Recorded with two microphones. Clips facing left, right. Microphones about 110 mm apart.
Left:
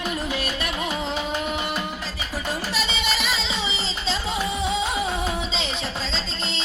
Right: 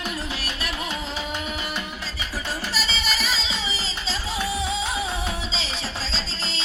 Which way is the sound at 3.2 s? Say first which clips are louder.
Left 1 dB; 60° left (ahead or behind).